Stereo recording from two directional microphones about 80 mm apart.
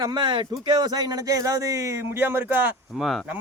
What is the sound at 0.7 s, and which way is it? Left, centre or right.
Speech, right.